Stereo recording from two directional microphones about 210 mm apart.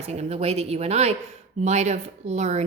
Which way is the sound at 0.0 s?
30° right (ahead or behind).